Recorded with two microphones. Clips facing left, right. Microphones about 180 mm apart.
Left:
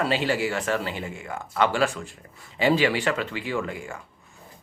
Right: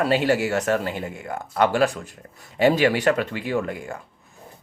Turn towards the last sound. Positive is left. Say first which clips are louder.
# right 4 dB
turn(degrees=-45)  # may be behind; listen again after turning